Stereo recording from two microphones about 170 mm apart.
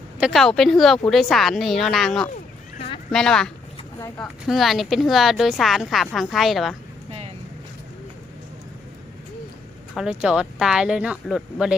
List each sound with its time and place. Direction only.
0.2 s a woman's voice: centre (ahead or behind)
7.1 s vehicle: 35° right (ahead or behind)
9.9 s a woman's voice: 5° right (ahead or behind)